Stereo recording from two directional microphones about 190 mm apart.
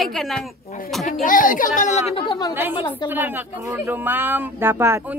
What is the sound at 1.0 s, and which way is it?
Speech, 45° left (ahead or behind).